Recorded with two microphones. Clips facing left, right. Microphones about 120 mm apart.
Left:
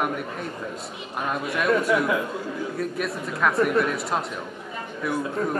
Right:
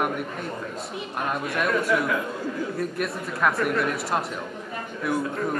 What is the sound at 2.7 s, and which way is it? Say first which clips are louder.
Speech: even; centre (ahead or behind).